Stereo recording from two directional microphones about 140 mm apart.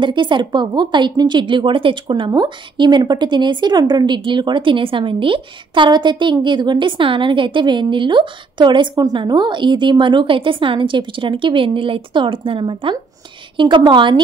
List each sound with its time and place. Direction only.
0.0 s a woman's voice: 35° right (ahead or behind)